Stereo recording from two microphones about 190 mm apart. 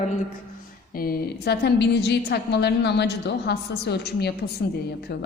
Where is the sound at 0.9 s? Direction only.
50° left (ahead or behind).